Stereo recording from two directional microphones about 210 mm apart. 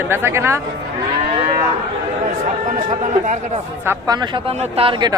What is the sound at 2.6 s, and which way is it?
Speech, 35° right (ahead or behind).